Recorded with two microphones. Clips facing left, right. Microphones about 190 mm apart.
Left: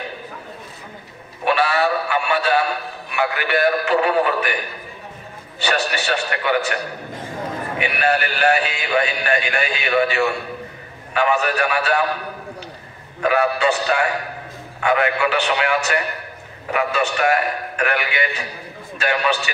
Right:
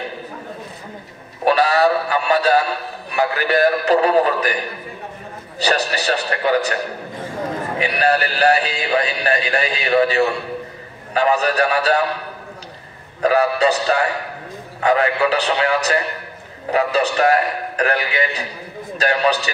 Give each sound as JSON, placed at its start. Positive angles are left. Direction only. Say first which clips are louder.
{"t": 1.4, "sound": "music", "louder": "right 4 dB", "side_deg": -40}
{"t": 3.1, "sound": "speech", "louder": "right 3 dB", "side_deg": -40}
{"t": 5.6, "sound": "speech", "louder": "right 2 dB", "side_deg": -35}
{"t": 7.8, "sound": "speech", "louder": "right 2 dB", "side_deg": -35}
{"t": 13.2, "sound": "speech", "louder": "right 2 dB", "side_deg": -35}